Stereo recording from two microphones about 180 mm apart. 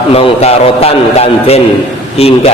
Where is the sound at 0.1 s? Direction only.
35° left (ahead or behind).